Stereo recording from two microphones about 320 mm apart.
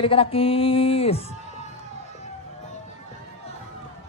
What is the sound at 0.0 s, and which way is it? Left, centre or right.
Music, centre.